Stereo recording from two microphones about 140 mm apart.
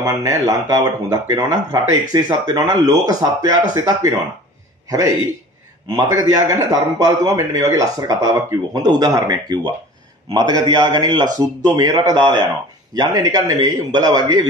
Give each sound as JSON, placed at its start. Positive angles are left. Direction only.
{"t": 0.0, "sound": "a man's voice", "side_deg": -20}
{"t": 5.9, "sound": "a man's voice", "side_deg": -25}